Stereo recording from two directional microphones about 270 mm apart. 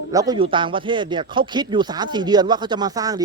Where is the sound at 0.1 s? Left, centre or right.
Centre.